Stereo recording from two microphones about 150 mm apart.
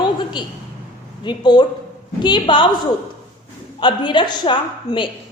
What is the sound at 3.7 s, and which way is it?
A woman's voice, 30° left (ahead or behind).